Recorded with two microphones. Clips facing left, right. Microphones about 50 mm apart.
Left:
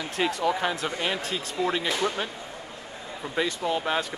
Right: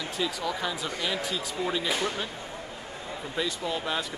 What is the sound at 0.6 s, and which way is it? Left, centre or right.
Speech, left.